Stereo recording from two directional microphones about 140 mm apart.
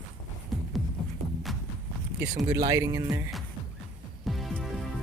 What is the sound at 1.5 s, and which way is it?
Walk, centre (ahead or behind).